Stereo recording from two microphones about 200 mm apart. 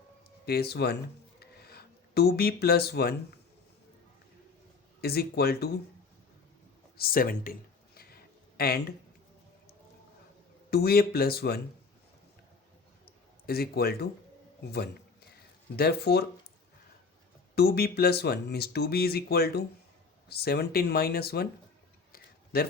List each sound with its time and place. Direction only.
0.4 s speech: 50° left (ahead or behind)
1.4 s a sound: 50° left (ahead or behind)
4.9 s speech: 50° left (ahead or behind)
6.9 s speech: 50° left (ahead or behind)
7.9 s a sound: 50° left (ahead or behind)
10.7 s speech: 50° left (ahead or behind)
13.1 s a sound: 50° left (ahead or behind)
14.6 s speech: 55° left (ahead or behind)
17.5 s speech: 50° left (ahead or behind)
22.5 s speech: 50° left (ahead or behind)